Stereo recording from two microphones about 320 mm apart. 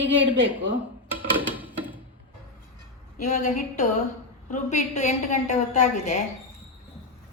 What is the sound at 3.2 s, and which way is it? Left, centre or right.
A woman's voice, left.